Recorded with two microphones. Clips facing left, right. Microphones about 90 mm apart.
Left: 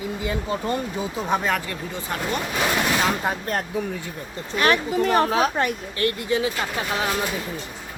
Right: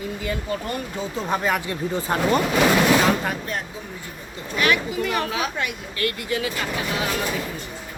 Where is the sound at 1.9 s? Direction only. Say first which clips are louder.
Right 7 dB; 35° right (ahead or behind).